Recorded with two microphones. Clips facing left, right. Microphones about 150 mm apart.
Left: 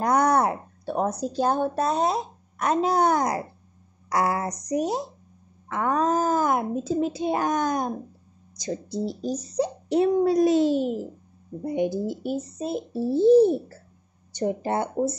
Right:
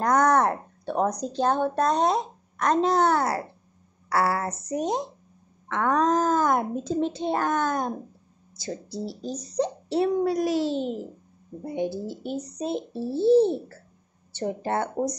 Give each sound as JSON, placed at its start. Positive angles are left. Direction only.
{"t": 0.0, "sound": "a child's voice", "side_deg": 10}